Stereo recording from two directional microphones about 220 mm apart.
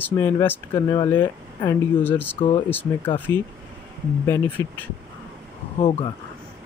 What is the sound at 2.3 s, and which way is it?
Mantra, 25° left (ahead or behind).